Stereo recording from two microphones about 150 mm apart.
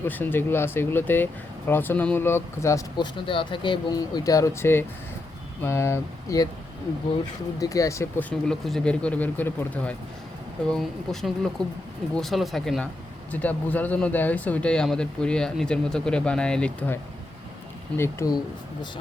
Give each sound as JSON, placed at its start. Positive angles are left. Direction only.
{"t": 0.0, "sound": "speech", "side_deg": 15}
{"t": 3.2, "sound": "speech", "side_deg": 35}
{"t": 7.6, "sound": "speech", "side_deg": 20}